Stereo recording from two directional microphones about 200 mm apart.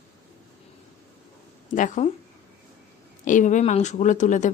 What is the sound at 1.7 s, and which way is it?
Speech, 40° left (ahead or behind).